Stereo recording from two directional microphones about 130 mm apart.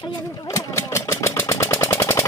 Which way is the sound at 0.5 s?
25° left (ahead or behind).